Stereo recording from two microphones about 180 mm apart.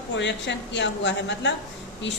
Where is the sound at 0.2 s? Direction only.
80° left.